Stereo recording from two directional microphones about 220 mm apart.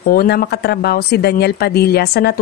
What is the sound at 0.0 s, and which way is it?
A woman's voice, 45° left (ahead or behind).